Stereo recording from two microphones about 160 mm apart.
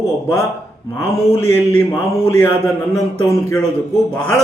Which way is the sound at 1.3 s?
15° left (ahead or behind).